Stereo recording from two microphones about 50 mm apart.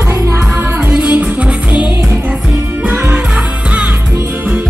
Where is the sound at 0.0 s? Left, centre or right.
Right.